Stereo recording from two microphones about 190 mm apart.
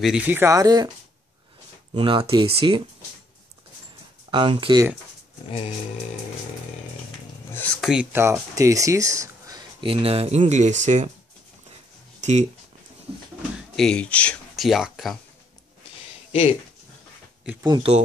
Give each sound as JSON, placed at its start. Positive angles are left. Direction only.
{"t": 0.0, "sound": "speech", "side_deg": -5}
{"t": 2.0, "sound": "speech", "side_deg": -25}
{"t": 4.3, "sound": "speech", "side_deg": -25}
{"t": 7.5, "sound": "speech", "side_deg": 5}
{"t": 12.2, "sound": "speech", "side_deg": -35}
{"t": 13.7, "sound": "speech", "side_deg": 5}
{"t": 16.3, "sound": "a sound", "side_deg": 35}
{"t": 17.6, "sound": "speech", "side_deg": -20}